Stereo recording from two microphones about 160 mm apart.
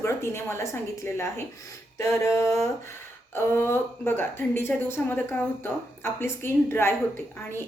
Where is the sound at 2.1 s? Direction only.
20° left (ahead or behind).